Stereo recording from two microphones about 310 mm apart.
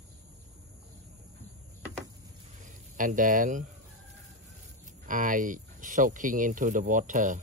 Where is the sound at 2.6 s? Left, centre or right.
Right.